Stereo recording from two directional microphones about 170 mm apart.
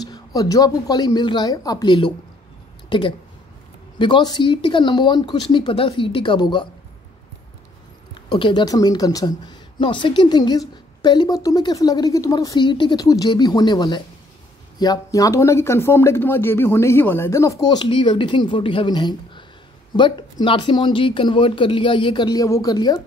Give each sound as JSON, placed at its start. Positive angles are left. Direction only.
{"t": 0.0, "sound": "speech", "side_deg": 20}
{"t": 8.3, "sound": "speech", "side_deg": 30}